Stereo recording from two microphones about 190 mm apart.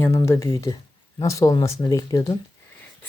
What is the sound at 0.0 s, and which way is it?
Speech, 15° left (ahead or behind).